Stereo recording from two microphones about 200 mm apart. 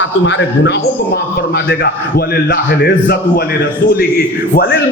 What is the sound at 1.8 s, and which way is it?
A man's voice, 50° left (ahead or behind).